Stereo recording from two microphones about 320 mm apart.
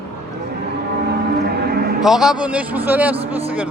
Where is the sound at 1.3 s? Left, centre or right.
Right.